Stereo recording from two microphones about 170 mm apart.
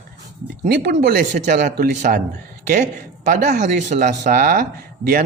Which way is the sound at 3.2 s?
45° right (ahead or behind).